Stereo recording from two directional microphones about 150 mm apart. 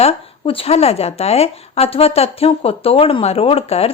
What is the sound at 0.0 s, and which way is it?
Speech, 40° left (ahead or behind).